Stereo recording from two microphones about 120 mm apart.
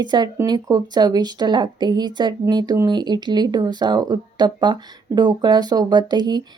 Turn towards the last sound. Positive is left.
turn(degrees=-35)  # may be behind; listen again after turning